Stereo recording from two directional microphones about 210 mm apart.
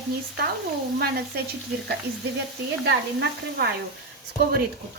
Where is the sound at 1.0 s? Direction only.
50° right (ahead or behind).